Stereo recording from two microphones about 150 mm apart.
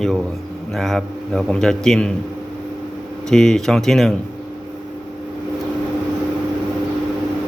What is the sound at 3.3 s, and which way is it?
Speech, 5° left (ahead or behind).